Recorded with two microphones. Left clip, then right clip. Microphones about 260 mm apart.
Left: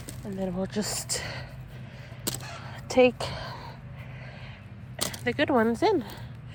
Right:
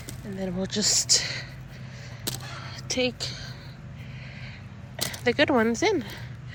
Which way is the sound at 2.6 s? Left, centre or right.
Centre.